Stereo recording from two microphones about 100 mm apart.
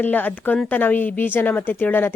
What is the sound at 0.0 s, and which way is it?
A woman's voice, 15° left (ahead or behind).